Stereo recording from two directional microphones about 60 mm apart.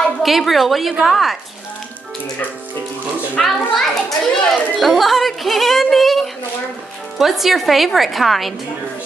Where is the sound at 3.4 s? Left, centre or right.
Centre.